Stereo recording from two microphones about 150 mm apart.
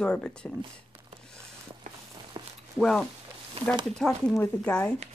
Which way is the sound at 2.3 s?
35° right (ahead or behind).